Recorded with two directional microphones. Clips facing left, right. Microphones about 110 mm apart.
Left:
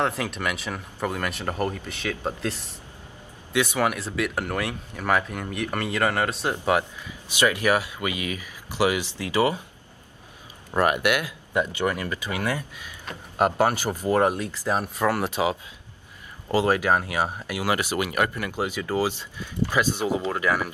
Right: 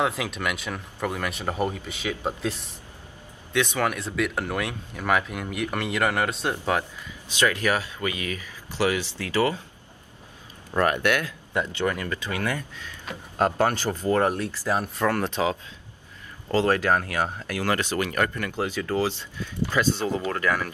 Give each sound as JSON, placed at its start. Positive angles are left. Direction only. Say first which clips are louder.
{"t": 0.0, "sound": "speech", "louder": "even", "side_deg": -5}
{"t": 3.5, "sound": "speech", "louder": "left 1 dB", "side_deg": 10}
{"t": 6.5, "sound": "speech", "louder": "left 3 dB", "side_deg": 15}
{"t": 10.7, "sound": "speech", "louder": "left 1 dB", "side_deg": 15}